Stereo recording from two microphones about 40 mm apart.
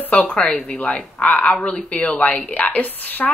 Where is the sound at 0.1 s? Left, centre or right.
Left.